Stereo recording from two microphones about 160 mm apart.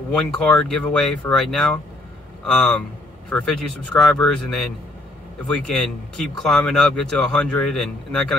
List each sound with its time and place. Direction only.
0.1 s a man's voice: 5° left (ahead or behind)